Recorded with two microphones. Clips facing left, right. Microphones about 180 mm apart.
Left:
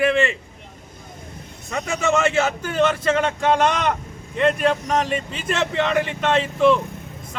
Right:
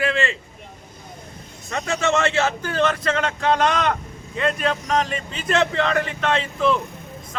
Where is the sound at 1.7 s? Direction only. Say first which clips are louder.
Even; 15° left (ahead or behind).